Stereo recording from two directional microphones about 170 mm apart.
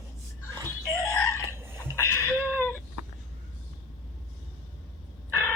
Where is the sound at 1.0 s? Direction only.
5° left (ahead or behind).